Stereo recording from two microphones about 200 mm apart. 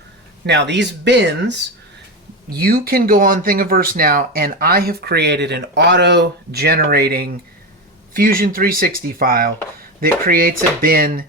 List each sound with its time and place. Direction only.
0.4 s speech: 60° right (ahead or behind)
2.6 s speech: 50° right (ahead or behind)